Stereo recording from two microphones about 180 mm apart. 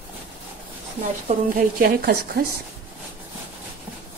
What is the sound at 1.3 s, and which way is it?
A woman's voice, 55° right (ahead or behind).